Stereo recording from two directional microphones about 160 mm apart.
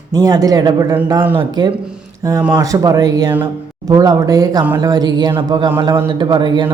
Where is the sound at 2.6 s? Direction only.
20° right (ahead or behind).